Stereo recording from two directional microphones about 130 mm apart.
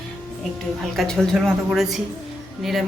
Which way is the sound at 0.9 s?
5° left (ahead or behind).